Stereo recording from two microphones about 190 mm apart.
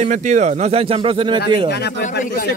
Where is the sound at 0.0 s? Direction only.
40° right (ahead or behind).